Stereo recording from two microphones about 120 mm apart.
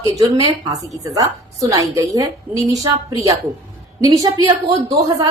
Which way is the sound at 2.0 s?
30° right (ahead or behind).